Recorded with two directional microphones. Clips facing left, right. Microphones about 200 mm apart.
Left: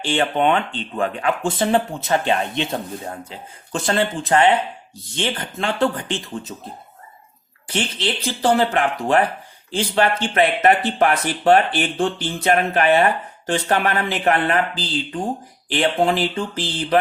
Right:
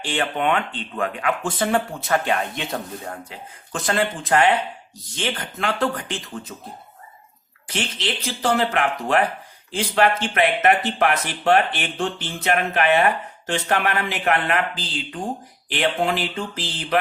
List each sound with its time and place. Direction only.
0.0 s speech: 30° left (ahead or behind)
7.7 s speech: 30° left (ahead or behind)